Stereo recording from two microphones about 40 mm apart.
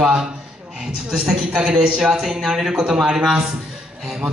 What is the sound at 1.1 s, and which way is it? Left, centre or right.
A man's voice, centre.